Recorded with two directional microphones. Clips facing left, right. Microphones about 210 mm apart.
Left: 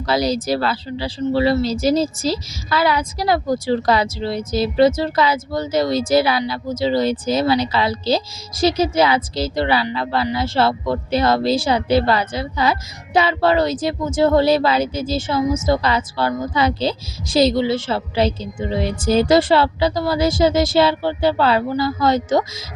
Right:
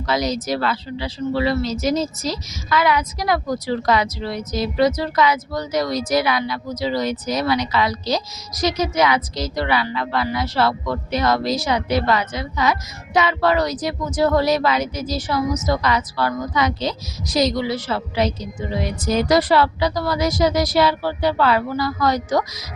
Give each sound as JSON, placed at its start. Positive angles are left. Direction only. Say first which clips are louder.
{"t": 0.1, "sound": "a woman's voice", "louder": "left 3 dB", "side_deg": 30}